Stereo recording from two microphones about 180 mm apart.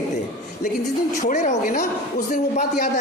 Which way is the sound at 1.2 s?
45° left (ahead or behind).